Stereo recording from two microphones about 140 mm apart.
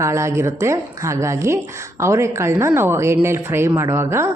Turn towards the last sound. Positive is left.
turn(degrees=-20)  # may be behind; listen again after turning